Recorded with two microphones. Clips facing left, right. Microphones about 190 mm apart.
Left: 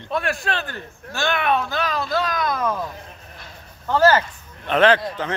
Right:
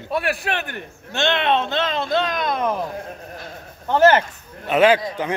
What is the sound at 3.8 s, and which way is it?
Speech, 20° right (ahead or behind).